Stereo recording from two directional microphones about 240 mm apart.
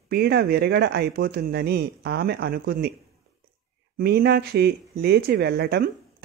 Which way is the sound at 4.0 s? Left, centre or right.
Right.